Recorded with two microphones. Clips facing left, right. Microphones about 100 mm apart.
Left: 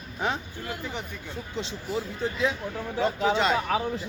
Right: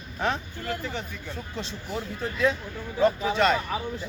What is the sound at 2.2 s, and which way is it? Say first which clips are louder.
Speech: right 3 dB; 20° left (ahead or behind).